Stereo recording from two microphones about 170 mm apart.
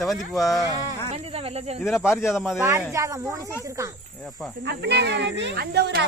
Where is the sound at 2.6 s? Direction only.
15° right (ahead or behind).